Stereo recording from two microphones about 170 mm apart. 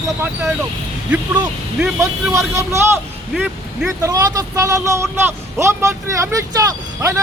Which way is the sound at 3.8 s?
20° right (ahead or behind).